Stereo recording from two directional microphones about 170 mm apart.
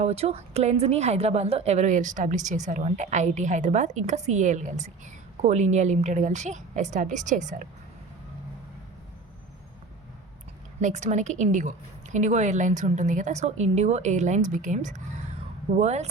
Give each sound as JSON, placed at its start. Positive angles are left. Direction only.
{"t": 0.0, "sound": "a woman's voice", "side_deg": -35}
{"t": 10.8, "sound": "a woman's voice", "side_deg": -45}